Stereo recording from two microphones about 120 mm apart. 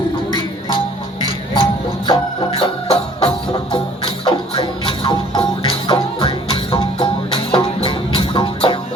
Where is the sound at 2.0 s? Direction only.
40° left (ahead or behind).